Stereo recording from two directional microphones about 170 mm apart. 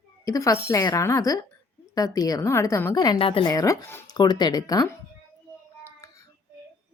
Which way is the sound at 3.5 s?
20° left (ahead or behind).